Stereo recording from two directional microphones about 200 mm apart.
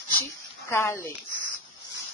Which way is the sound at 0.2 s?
15° left (ahead or behind).